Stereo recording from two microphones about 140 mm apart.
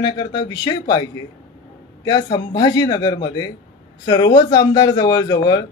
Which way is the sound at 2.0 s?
30° left (ahead or behind).